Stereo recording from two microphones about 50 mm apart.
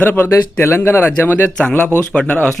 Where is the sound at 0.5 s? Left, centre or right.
Left.